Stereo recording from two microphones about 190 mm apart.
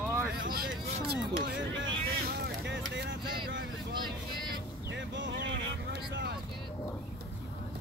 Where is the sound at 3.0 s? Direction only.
70° right (ahead or behind).